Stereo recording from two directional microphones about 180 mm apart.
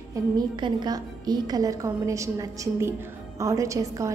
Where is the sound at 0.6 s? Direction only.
25° right (ahead or behind).